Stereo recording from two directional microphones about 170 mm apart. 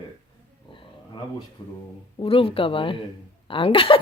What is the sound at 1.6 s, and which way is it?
A woman's voice, 25° left (ahead or behind).